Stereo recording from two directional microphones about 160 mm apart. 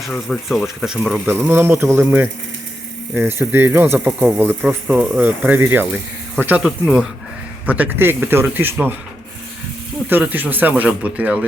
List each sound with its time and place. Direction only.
0.0 s speech: centre (ahead or behind)
10.1 s speech: 10° right (ahead or behind)